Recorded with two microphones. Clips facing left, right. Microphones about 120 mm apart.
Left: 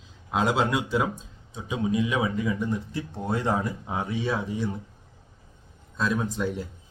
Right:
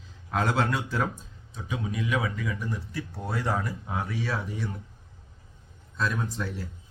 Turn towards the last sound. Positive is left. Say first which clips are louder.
# left 4 dB
turn(degrees=15)  # may be behind; listen again after turning